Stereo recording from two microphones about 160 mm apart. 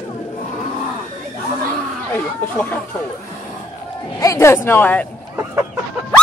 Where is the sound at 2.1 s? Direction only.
10° left (ahead or behind).